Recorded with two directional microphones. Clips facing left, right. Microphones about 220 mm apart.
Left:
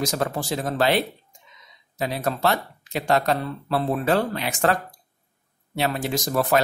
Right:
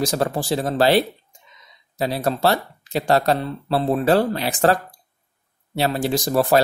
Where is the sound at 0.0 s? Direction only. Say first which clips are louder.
Right 4 dB; 35° right (ahead or behind).